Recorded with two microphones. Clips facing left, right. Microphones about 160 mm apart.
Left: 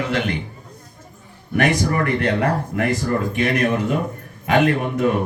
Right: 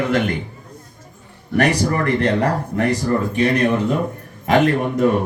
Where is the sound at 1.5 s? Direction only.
35° right (ahead or behind).